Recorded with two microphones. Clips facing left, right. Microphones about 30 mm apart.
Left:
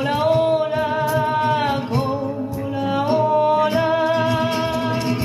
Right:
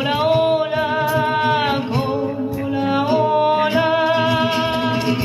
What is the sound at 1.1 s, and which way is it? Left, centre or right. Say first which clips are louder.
Singing: right 1 dB; right.